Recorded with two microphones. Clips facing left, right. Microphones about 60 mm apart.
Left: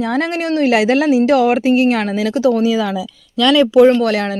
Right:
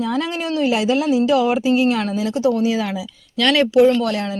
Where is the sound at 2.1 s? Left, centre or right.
Left.